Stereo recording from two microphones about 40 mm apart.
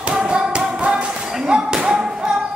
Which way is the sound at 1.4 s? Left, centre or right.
Right.